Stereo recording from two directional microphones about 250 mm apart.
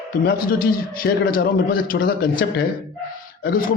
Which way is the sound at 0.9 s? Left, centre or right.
Left.